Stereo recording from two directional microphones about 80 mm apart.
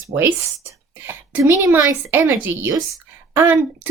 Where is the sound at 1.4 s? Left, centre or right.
Right.